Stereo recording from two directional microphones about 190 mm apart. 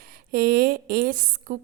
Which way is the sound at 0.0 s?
50° right (ahead or behind).